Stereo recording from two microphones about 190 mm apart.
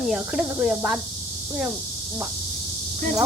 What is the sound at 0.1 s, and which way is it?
Speech, 5° right (ahead or behind).